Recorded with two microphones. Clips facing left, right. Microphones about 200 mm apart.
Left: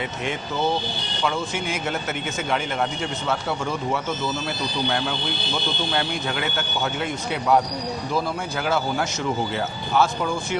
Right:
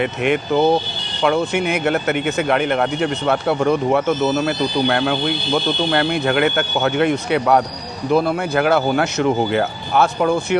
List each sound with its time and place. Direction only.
0.0 s speech: 65° right (ahead or behind)